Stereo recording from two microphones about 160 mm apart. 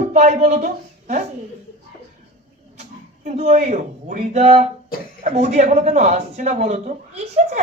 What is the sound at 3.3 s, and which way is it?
Speech, 45° right (ahead or behind).